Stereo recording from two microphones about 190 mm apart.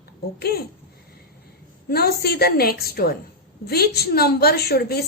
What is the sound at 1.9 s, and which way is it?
A woman's voice, 55° left (ahead or behind).